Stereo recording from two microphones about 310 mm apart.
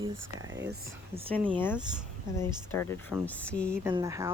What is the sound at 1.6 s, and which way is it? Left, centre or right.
Speech, centre.